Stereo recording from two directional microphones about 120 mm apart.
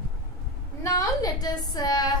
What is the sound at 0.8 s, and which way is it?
A woman's voice, 30° left (ahead or behind).